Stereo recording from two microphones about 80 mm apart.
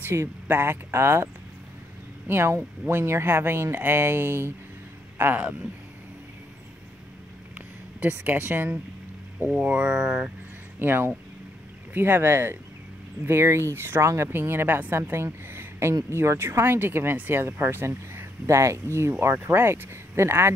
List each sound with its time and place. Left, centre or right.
0.0 s speech: right
5.1 s a sound: right
8.1 s speech: right
9.8 s speech: centre
10.8 s speech: right